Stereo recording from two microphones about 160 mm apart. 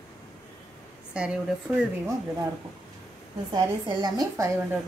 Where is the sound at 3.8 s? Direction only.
25° right (ahead or behind).